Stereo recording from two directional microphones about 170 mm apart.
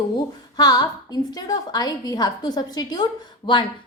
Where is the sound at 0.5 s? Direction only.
25° left (ahead or behind).